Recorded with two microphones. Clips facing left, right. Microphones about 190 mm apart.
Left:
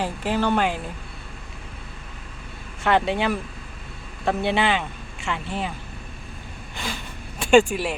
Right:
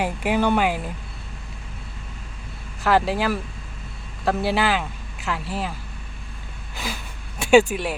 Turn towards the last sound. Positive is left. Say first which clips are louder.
# right 1 dB
turn(degrees=-5)  # may be behind; listen again after turning